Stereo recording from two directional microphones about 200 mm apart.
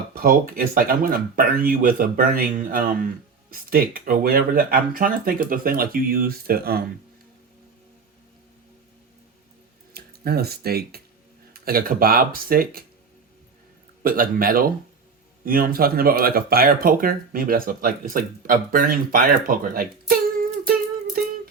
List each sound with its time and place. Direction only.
0.1 s speech: 45° right (ahead or behind)
9.9 s speech: 50° right (ahead or behind)
14.0 s speech: 45° right (ahead or behind)